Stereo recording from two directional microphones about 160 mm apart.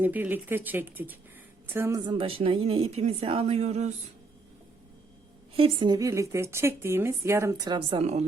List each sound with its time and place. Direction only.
0.0 s a woman's voice: 10° right (ahead or behind)
2.0 s a woman's voice: 35° right (ahead or behind)
5.5 s a woman's voice: 30° right (ahead or behind)